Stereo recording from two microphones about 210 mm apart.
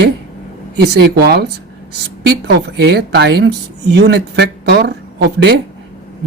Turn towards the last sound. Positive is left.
turn(degrees=-55)  # may be behind; listen again after turning